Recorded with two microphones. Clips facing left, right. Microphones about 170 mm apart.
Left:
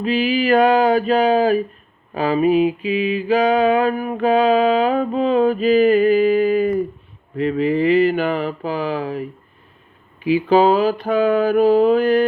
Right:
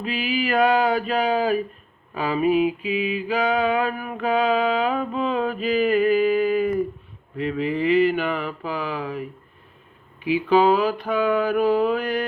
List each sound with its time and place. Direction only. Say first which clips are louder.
0.0 s mantra: left 7 dB; 30° left (ahead or behind)
3.2 s a sound: left 7 dB; 35° left (ahead or behind)
7.3 s mantra: left 6 dB; 40° left (ahead or behind)
10.2 s mantra: left 4 dB; 35° left (ahead or behind)